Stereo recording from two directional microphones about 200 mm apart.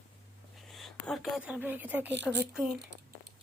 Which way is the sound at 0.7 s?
Centre (ahead or behind).